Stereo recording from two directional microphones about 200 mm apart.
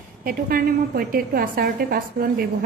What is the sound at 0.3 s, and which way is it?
A woman's voice, 45° right (ahead or behind).